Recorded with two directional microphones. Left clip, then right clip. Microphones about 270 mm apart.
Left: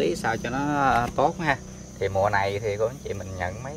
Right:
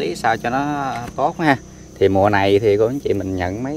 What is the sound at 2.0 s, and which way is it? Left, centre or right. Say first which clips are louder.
Speech: right 8 dB; right.